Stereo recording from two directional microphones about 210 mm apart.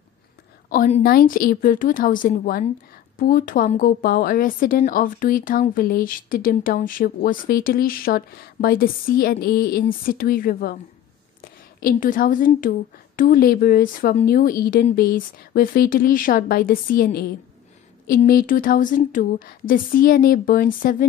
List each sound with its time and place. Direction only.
0.7 s a woman's voice: 35° left (ahead or behind)